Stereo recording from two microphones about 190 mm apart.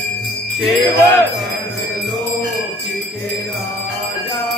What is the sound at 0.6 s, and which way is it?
Jingle bell, centre (ahead or behind).